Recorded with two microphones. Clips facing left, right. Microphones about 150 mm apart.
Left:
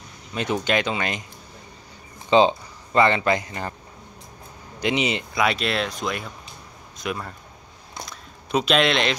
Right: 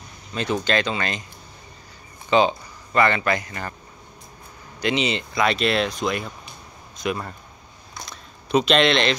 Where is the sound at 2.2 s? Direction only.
20° left (ahead or behind).